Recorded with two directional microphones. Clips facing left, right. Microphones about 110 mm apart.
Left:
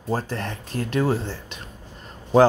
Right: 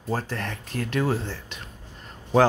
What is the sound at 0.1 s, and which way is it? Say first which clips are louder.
Speech: left 2 dB; 30° left (ahead or behind).